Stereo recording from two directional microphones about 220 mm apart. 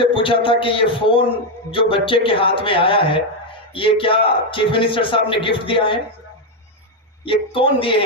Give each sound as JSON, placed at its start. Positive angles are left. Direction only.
{"t": 0.0, "sound": "a man's voice", "side_deg": 25}
{"t": 7.2, "sound": "a man's voice", "side_deg": 25}